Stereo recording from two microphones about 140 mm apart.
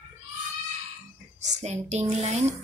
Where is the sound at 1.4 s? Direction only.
55° right (ahead or behind).